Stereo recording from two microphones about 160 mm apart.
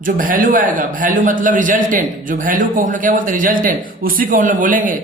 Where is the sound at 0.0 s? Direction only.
55° right (ahead or behind).